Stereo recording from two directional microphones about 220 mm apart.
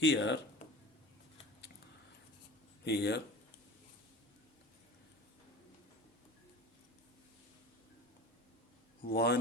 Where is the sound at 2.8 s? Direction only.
50° left (ahead or behind).